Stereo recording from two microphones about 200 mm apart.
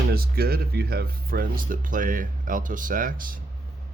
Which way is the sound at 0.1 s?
50° right (ahead or behind).